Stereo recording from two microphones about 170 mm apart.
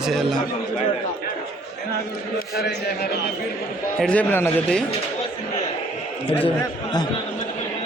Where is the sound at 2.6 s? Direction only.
70° left (ahead or behind).